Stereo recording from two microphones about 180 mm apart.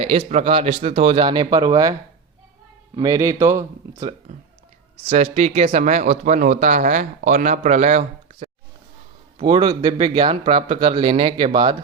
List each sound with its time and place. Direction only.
0.0 s speech: 30° right (ahead or behind); by 4.1 s 15° right (ahead or behind)
5.0 s speech: 35° right (ahead or behind)
9.4 s speech: 25° right (ahead or behind)